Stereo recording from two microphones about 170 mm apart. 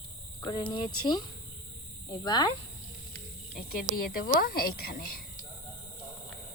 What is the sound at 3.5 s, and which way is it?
A woman's voice, 60° left (ahead or behind).